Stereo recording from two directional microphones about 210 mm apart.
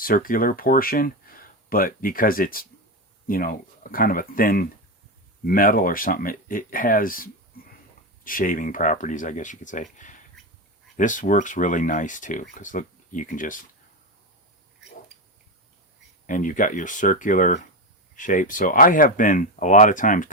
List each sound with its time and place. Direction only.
0.0 s speech: 40° left (ahead or behind)
16.2 s speech: 40° left (ahead or behind)